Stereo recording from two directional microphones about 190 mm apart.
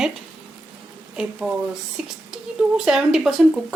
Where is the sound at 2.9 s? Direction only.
5° right (ahead or behind).